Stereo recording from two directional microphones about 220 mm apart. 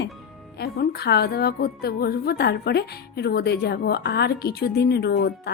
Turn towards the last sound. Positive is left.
turn(degrees=50)  # may be behind; listen again after turning